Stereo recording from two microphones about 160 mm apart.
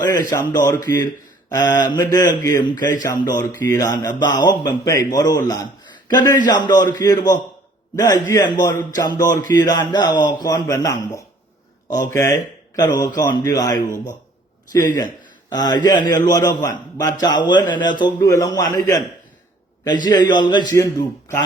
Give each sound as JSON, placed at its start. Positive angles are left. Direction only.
{"t": 0.0, "sound": "speech", "side_deg": 25}
{"t": 20.1, "sound": "speech", "side_deg": 25}